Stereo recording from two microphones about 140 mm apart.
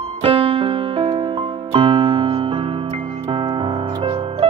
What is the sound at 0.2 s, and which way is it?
Music, 40° right (ahead or behind).